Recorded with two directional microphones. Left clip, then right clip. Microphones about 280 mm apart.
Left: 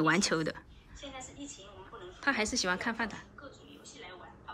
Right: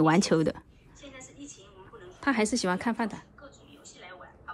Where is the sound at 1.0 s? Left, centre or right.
Centre.